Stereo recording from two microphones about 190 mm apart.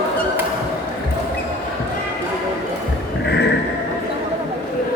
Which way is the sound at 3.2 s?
65° left (ahead or behind).